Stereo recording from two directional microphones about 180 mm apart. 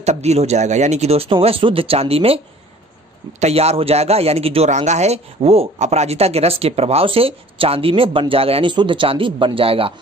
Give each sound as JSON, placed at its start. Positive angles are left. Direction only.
{"t": 0.0, "sound": "speech", "side_deg": -40}